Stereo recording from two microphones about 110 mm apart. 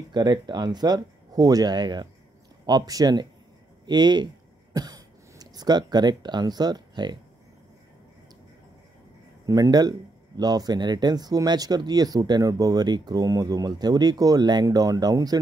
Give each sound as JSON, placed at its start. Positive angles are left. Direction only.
{"t": 0.1, "sound": "speech", "side_deg": -40}
{"t": 9.5, "sound": "speech", "side_deg": -35}